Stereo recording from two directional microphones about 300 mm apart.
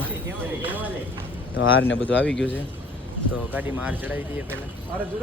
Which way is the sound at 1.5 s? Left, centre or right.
Left.